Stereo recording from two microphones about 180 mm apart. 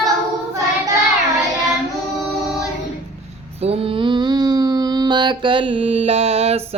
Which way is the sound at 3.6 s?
35° right (ahead or behind).